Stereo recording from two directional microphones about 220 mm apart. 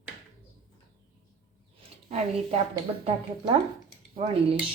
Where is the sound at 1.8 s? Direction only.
30° right (ahead or behind).